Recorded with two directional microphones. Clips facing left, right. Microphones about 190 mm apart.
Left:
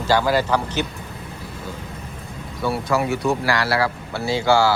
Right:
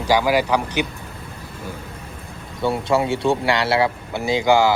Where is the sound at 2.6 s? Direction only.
25° right (ahead or behind).